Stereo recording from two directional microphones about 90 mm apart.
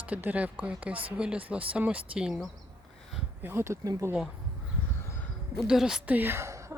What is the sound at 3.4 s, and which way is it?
Speech, 25° right (ahead or behind).